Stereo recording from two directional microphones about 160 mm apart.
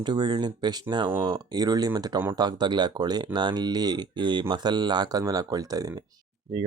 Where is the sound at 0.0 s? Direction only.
25° right (ahead or behind).